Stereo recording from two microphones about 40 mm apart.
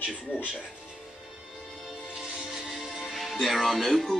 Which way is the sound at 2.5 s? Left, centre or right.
Centre.